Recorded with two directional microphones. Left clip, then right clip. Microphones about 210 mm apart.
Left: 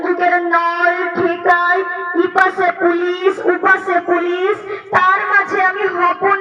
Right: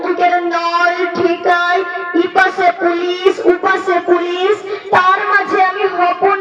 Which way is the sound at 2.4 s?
35° left (ahead or behind).